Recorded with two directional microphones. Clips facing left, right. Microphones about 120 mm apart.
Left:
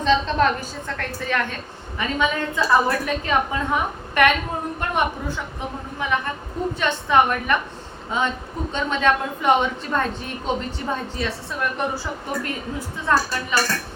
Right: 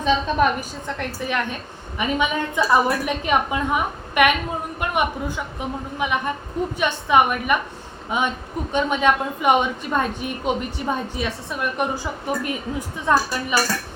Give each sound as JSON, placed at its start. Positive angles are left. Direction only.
{"t": 0.0, "sound": "a woman's voice", "side_deg": -10}
{"t": 6.0, "sound": "a woman's voice", "side_deg": -15}